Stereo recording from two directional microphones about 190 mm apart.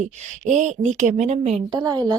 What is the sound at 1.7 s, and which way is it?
Speech, 20° right (ahead or behind).